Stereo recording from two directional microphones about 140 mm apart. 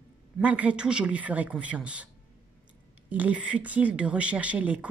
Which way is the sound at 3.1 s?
10° right (ahead or behind).